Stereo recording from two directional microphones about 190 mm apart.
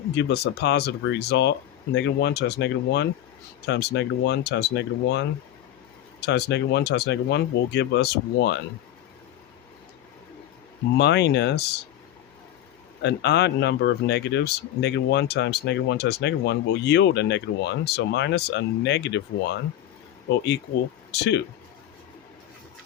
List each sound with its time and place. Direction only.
0.1 s speech: 65° left (ahead or behind)
10.9 s speech: 65° left (ahead or behind)
13.0 s speech: 65° left (ahead or behind)